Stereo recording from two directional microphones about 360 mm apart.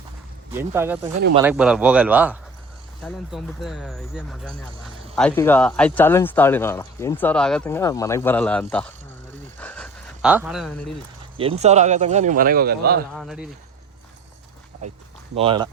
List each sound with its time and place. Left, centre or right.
0.5 s speech: centre
9.6 s a sound: centre
11.6 s a man's voice: centre
13.1 s speech: centre
15.4 s speech: centre